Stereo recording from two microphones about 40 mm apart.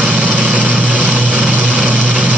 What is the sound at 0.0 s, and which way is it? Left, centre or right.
Vehicle, right.